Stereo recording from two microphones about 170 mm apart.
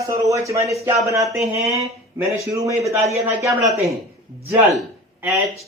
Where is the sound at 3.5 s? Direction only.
Centre (ahead or behind).